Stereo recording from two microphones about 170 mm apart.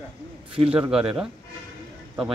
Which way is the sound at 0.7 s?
5° right (ahead or behind).